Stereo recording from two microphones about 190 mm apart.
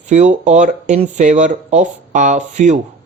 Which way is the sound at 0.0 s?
40° right (ahead or behind).